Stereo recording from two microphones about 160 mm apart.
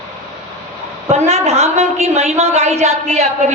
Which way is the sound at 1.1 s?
40° right (ahead or behind).